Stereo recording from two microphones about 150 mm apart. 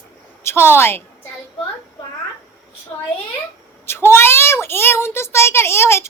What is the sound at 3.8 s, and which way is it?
A child's voice, 15° left (ahead or behind).